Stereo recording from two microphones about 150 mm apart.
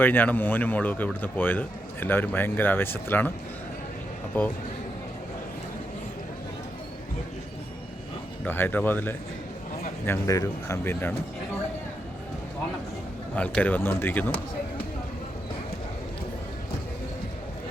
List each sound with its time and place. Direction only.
0.0 s speech: 15° left (ahead or behind)
4.4 s speech: 15° left (ahead or behind)
8.4 s speech: 15° left (ahead or behind)
13.3 s speech: 10° left (ahead or behind)